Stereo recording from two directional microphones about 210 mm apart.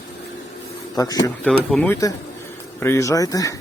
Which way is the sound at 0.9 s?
20° left (ahead or behind).